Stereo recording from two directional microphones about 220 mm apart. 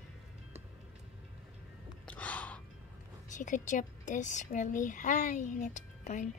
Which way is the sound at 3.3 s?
35° left (ahead or behind).